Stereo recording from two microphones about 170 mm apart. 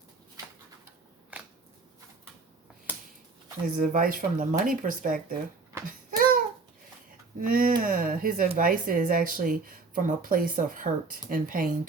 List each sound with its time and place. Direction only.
1.3 s shuffling cards: 10° right (ahead or behind)
3.8 s speech: 55° right (ahead or behind)
6.1 s babbling: 55° right (ahead or behind)
7.3 s speech: 55° right (ahead or behind)